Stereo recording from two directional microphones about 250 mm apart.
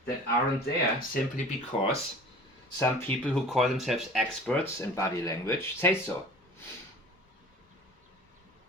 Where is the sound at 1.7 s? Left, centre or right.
Left.